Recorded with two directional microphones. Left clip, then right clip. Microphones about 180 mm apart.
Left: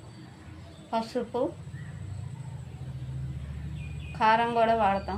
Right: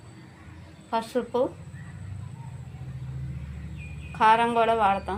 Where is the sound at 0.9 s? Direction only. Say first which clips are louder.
Right 3 dB; 25° right (ahead or behind).